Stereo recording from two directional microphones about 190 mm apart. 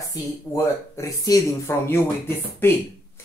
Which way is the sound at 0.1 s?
15° left (ahead or behind).